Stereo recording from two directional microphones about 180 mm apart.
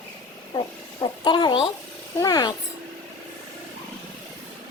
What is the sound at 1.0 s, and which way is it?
A woman's voice, 25° left (ahead or behind).